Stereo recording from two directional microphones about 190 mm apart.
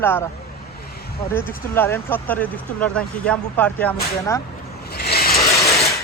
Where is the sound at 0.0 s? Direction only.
10° left (ahead or behind).